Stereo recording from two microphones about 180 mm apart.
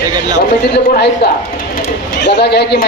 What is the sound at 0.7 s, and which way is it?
A man's voice, 65° left (ahead or behind).